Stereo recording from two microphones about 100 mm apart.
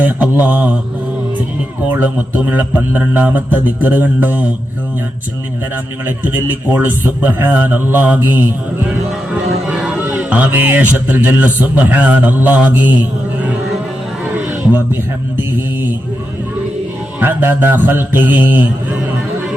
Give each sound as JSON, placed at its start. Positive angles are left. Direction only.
{"t": 0.0, "sound": "a man's voice", "side_deg": -15}
{"t": 1.9, "sound": "a man's voice", "side_deg": -15}
{"t": 6.1, "sound": "a man's voice", "side_deg": -20}
{"t": 10.2, "sound": "a man's voice", "side_deg": -15}
{"t": 17.2, "sound": "a man's voice", "side_deg": -20}